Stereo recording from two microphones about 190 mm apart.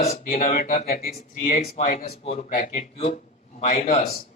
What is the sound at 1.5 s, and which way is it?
Speech, 35° left (ahead or behind).